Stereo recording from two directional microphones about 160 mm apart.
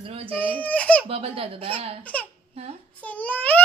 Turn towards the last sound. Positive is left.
turn(degrees=10)  # may be behind; listen again after turning